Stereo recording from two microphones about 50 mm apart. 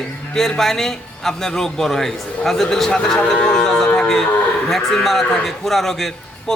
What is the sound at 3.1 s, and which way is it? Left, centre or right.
A man's voice, centre.